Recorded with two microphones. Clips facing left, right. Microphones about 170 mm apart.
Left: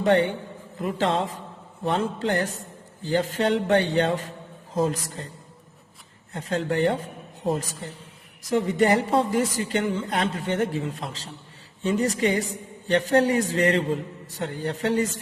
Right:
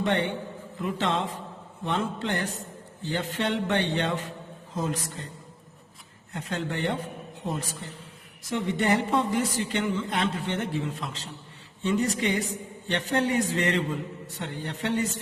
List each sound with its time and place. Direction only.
0.8 s a woman's voice: 35° left (ahead or behind)
6.3 s a woman's voice: 35° left (ahead or behind)
8.4 s a woman's voice: 40° left (ahead or behind)